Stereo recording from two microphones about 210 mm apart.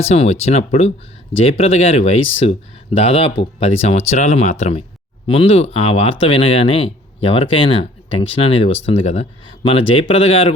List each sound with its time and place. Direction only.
0.0 s speech: 30° left (ahead or behind)